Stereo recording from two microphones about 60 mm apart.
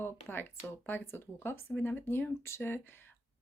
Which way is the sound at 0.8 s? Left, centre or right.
Left.